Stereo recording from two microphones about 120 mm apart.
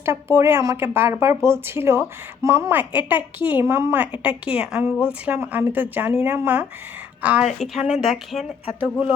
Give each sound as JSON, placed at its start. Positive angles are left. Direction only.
{"t": 0.0, "sound": "speech", "side_deg": -20}
{"t": 4.2, "sound": "speech", "side_deg": -10}
{"t": 8.8, "sound": "speech", "side_deg": -15}